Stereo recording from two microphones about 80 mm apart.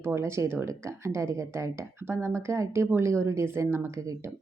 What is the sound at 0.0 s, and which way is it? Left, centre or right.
Speech, right.